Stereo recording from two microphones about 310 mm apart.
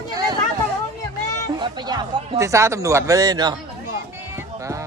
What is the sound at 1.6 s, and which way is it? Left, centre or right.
Speech, centre.